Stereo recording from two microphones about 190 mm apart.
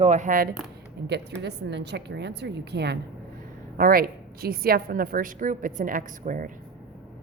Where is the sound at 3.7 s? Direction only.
50° right (ahead or behind).